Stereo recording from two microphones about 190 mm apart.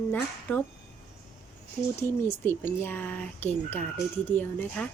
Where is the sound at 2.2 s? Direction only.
10° left (ahead or behind).